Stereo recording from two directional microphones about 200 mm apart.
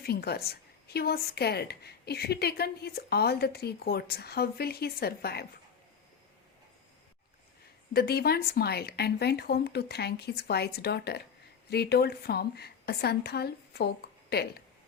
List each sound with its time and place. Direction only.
0.0 s a woman's voice: 50° left (ahead or behind)
7.9 s a woman's voice: 50° left (ahead or behind)